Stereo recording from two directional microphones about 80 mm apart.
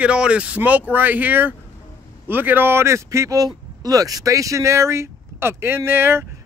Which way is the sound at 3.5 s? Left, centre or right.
Right.